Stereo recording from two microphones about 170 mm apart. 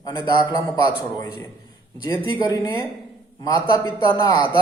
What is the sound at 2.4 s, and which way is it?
Speech, 25° left (ahead or behind).